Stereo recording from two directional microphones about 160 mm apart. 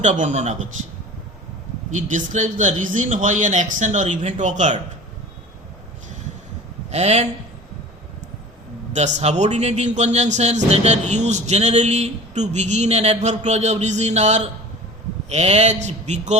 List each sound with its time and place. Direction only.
0.0 s a man's voice: 50° right (ahead or behind)
1.9 s a man's voice: 50° right (ahead or behind)
6.9 s a man's voice: 40° right (ahead or behind)
8.9 s a man's voice: 45° right (ahead or behind)